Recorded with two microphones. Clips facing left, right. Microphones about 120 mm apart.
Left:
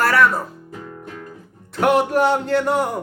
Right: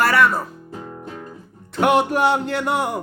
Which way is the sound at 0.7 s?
30° right (ahead or behind).